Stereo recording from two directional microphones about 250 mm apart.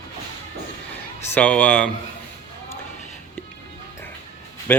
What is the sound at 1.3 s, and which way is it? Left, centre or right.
Speech, centre.